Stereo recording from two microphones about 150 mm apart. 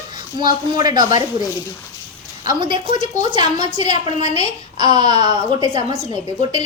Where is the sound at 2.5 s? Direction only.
30° right (ahead or behind).